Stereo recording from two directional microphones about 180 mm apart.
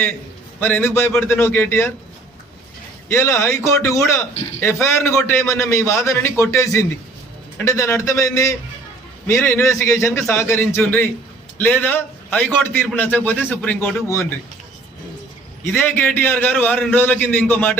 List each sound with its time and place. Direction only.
0.6 s a man's voice: 10° left (ahead or behind)
3.1 s a man's voice: 15° left (ahead or behind)
15.7 s a man's voice: 10° left (ahead or behind)